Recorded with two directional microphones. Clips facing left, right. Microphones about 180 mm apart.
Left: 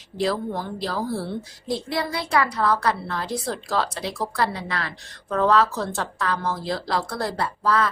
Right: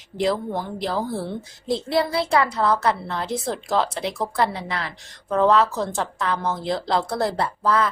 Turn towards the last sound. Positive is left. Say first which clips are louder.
# right 1 dB
turn(degrees=-20)  # may be behind; listen again after turning